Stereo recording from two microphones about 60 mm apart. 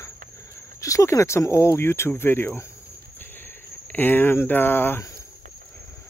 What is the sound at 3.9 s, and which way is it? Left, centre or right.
Speech, left.